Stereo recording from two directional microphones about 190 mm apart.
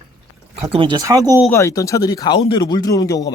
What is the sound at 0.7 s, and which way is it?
Speech, 25° right (ahead or behind).